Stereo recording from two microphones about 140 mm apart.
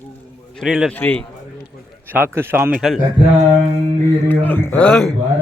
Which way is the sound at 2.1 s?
15° right (ahead or behind).